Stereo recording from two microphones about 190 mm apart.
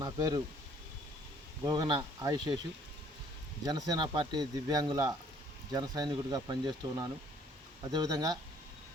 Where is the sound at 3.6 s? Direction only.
20° right (ahead or behind).